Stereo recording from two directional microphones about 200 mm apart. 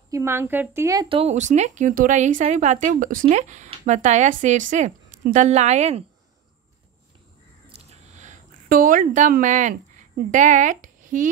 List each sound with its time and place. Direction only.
0.1 s a woman's voice: 10° right (ahead or behind); by 6.0 s 35° right (ahead or behind)
7.7 s a sound: 35° right (ahead or behind)
10.3 s speech: 40° right (ahead or behind)